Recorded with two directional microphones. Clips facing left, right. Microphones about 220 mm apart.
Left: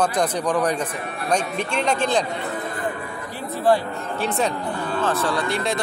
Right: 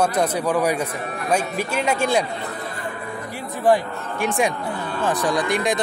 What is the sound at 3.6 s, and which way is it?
Speech, 15° right (ahead or behind).